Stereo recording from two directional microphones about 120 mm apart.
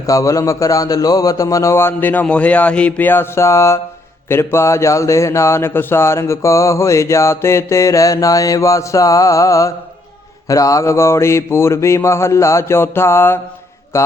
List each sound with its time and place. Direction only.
0.1 s speech: 25° left (ahead or behind)